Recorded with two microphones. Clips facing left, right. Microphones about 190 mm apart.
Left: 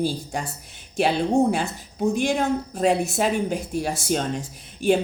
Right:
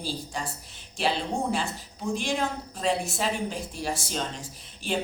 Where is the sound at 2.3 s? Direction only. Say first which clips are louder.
Left 6 dB; 60° left (ahead or behind).